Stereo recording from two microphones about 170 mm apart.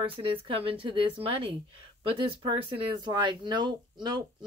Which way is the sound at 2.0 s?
30° right (ahead or behind).